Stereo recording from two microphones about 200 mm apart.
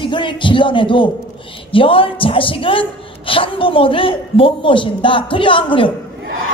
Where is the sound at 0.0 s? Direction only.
25° left (ahead or behind).